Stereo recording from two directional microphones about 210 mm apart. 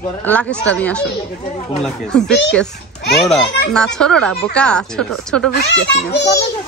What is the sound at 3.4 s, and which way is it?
Speech, 55° left (ahead or behind).